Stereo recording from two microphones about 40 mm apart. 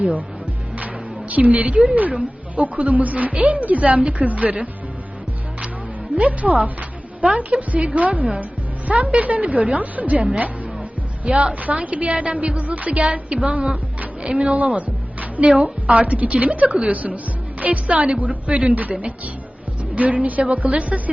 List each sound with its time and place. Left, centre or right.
1.3 s speech: right
6.1 s speech: right
11.3 s a woman's voice: right